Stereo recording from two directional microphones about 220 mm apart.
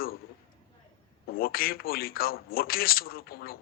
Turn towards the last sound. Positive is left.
turn(degrees=45)  # may be behind; listen again after turning